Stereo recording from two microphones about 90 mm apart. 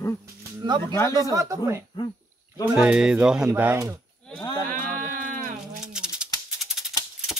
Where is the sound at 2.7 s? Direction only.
10° right (ahead or behind).